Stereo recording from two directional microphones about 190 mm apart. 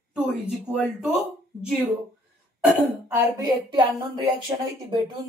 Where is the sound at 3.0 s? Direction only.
10° right (ahead or behind).